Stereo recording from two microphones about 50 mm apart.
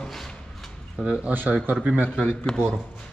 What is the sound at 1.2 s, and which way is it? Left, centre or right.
Speech, right.